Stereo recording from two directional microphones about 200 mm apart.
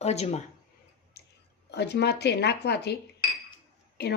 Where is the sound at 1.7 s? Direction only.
55° left (ahead or behind).